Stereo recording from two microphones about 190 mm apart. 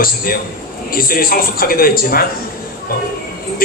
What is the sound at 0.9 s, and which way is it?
A man's voice, 50° left (ahead or behind).